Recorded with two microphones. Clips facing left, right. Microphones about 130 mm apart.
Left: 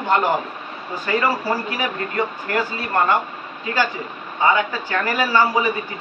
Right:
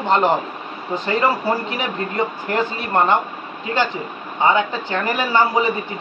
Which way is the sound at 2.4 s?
20° right (ahead or behind).